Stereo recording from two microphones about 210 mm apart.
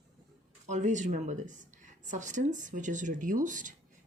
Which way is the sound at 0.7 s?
35° right (ahead or behind).